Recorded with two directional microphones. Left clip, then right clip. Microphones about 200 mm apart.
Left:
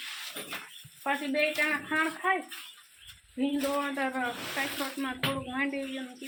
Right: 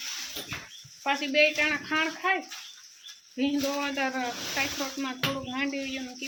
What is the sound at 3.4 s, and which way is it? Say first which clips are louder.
Speech: right 1 dB; 10° right (ahead or behind).